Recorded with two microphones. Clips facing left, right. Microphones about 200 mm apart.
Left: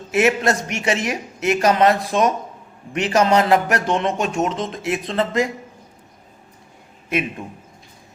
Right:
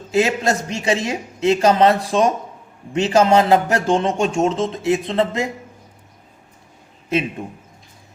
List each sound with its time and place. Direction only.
0.1 s speech: 25° right (ahead or behind)